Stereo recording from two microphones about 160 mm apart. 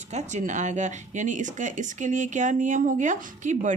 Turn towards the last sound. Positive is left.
turn(degrees=-50)  # may be behind; listen again after turning